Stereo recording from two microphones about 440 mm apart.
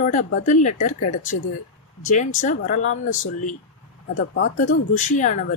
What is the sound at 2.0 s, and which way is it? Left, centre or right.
Speech, centre.